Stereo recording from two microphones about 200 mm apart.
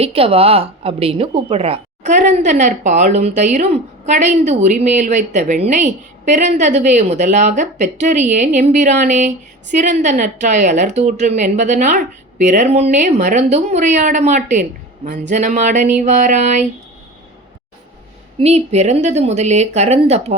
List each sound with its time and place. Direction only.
0.0 s speech: 30° right (ahead or behind)
18.3 s speech: 35° right (ahead or behind)